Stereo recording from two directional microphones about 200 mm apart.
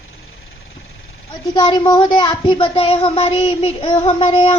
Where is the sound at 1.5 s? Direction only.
20° left (ahead or behind).